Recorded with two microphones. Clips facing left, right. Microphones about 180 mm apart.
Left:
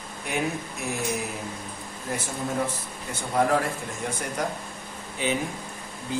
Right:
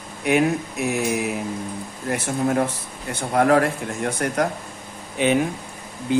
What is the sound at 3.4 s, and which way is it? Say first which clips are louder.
Speech: right 6 dB; 65° right (ahead or behind).